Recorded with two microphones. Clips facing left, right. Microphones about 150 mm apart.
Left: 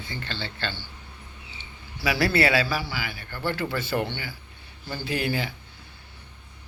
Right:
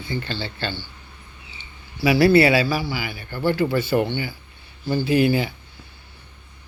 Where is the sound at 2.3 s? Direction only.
10° right (ahead or behind).